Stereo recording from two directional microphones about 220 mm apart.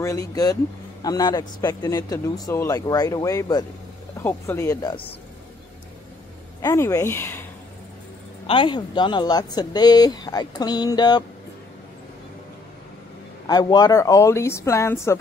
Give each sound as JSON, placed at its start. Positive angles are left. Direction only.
{"t": 0.0, "sound": "speech", "side_deg": 15}
{"t": 6.6, "sound": "speech", "side_deg": 15}
{"t": 8.5, "sound": "speech", "side_deg": 20}
{"t": 13.5, "sound": "speech", "side_deg": 20}